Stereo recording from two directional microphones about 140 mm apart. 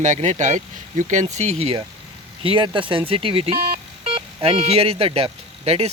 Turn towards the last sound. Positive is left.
turn(degrees=-45)  # may be behind; listen again after turning